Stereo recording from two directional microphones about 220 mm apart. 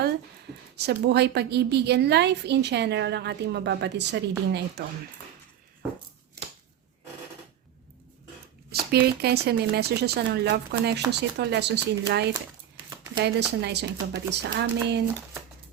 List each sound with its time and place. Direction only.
0.8 s a woman's voice: 50° right (ahead or behind)
8.9 s a woman's voice: 45° right (ahead or behind)